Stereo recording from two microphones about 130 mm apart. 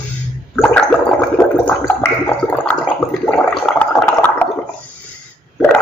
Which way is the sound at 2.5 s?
10° left (ahead or behind).